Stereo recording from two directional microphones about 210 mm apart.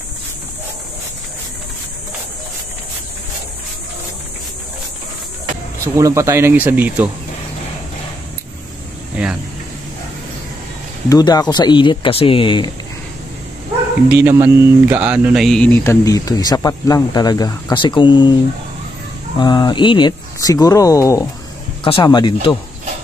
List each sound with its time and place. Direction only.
5.9 s speech: 15° right (ahead or behind)
11.1 s speech: 15° left (ahead or behind)
14.1 s speech: 10° right (ahead or behind); by 22.6 s 20° left (ahead or behind)